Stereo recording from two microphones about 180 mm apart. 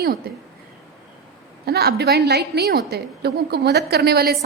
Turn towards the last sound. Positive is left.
turn(degrees=-60)  # may be behind; listen again after turning